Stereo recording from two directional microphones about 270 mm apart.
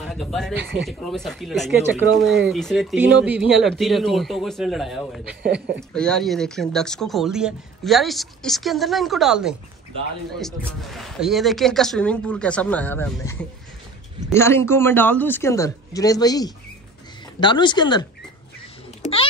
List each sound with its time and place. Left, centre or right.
0.0 s speech: centre
0.6 s speech: right
0.8 s speech: centre
5.4 s speech: right
5.8 s speech: centre
10.8 s a man's voice: centre